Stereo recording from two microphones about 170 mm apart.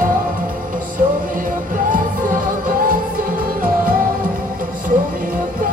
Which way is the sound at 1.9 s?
55° right (ahead or behind).